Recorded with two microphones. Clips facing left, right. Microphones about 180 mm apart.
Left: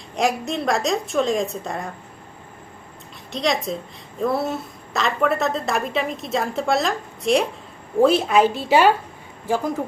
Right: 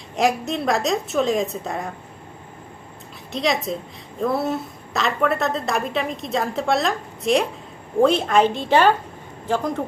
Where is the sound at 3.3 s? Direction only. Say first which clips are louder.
Even; centre (ahead or behind).